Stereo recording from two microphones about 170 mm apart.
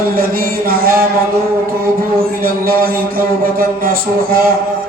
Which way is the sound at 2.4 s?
60° right (ahead or behind).